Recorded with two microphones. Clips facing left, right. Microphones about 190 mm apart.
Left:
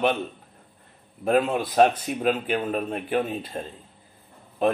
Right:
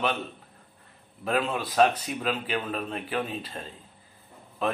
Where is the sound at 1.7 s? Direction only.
40° left (ahead or behind).